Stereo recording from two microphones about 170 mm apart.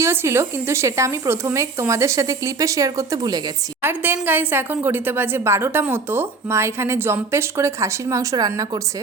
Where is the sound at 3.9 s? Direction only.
10° right (ahead or behind).